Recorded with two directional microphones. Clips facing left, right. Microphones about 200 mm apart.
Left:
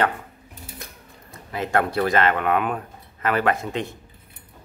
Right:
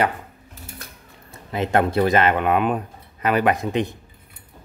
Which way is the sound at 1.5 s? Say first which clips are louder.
Right 3 dB; 20° right (ahead or behind).